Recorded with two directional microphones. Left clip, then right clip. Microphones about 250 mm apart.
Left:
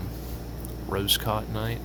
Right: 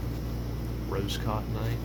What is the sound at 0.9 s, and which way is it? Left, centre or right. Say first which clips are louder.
Speech: left 8 dB; left.